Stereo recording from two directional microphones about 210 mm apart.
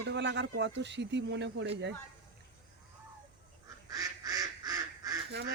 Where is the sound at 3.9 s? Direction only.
15° right (ahead or behind).